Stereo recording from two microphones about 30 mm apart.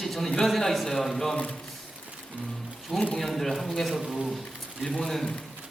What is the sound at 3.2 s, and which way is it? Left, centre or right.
Speech, centre.